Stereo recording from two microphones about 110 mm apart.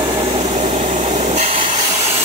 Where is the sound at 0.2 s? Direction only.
70° right (ahead or behind).